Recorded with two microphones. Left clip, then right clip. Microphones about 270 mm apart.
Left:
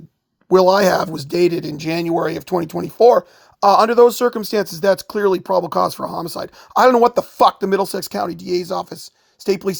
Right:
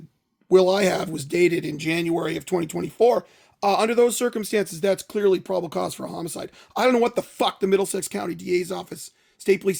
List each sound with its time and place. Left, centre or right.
0.5 s speech: left